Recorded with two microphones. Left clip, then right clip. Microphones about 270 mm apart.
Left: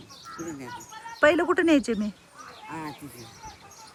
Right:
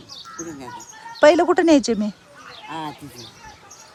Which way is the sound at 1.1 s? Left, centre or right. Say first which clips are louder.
Right 7 dB; centre.